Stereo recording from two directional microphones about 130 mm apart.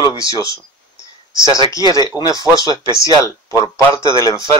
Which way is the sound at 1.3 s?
35° right (ahead or behind).